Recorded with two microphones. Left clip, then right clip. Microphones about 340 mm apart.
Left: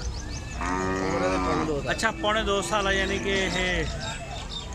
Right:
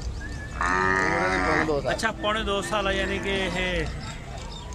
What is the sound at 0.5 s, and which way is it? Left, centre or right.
Livestock, right.